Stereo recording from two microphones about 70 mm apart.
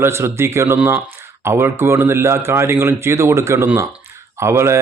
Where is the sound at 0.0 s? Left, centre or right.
Right.